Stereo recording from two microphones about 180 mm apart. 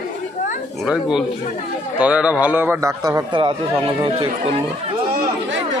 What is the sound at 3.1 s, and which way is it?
Speech, 25° right (ahead or behind).